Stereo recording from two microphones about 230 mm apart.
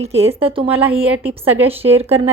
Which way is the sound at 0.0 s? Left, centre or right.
Right.